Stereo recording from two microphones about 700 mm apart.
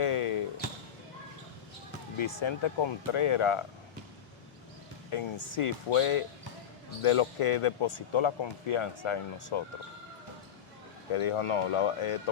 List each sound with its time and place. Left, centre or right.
0.0 s basketball bounce: left
2.1 s speech: left
5.1 s speech: left
11.1 s speech: left